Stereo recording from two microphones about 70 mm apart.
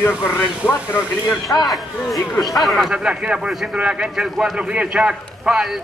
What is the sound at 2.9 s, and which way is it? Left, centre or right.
A man's voice, centre.